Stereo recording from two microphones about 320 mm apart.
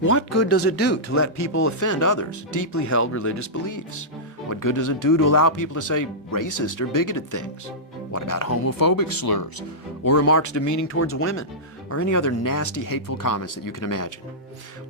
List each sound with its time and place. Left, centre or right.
0.0 s speech: left
8.1 s speech: left
10.2 s speech: left